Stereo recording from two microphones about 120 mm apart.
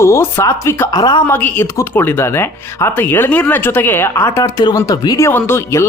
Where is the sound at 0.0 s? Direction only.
20° left (ahead or behind).